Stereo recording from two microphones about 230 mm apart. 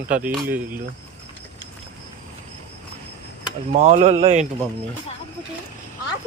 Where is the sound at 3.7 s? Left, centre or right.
Right.